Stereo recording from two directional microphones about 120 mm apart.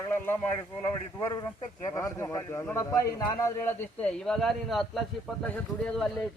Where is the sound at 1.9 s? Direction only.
25° left (ahead or behind).